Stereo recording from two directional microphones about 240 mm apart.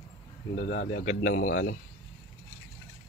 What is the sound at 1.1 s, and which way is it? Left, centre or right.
Speech, left.